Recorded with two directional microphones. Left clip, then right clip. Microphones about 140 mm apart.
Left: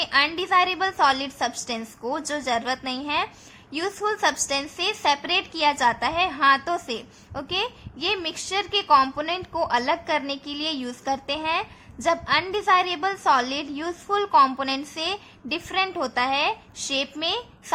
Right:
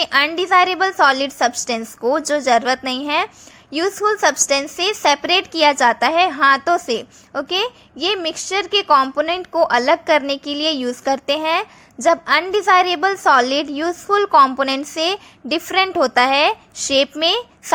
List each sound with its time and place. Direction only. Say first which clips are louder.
0.0 s a woman's voice: right 5 dB; 45° right (ahead or behind)